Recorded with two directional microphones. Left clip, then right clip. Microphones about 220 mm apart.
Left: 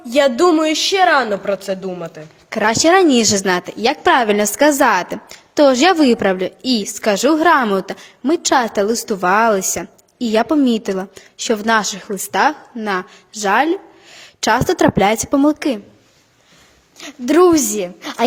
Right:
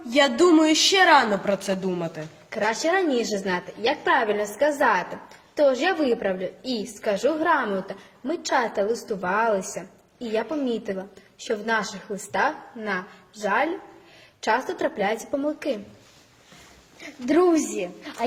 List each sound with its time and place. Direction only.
0.1 s a woman's voice: 35° left (ahead or behind)
2.5 s a woman's voice: 45° left (ahead or behind)
17.0 s a woman's voice: 45° left (ahead or behind)